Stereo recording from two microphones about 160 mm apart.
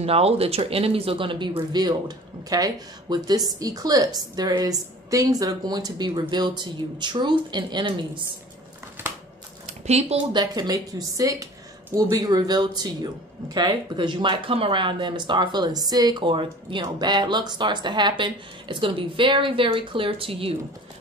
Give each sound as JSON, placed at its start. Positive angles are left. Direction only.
{"t": 0.0, "sound": "speech", "side_deg": -40}
{"t": 9.7, "sound": "a sound", "side_deg": -40}
{"t": 10.3, "sound": "speech", "side_deg": -25}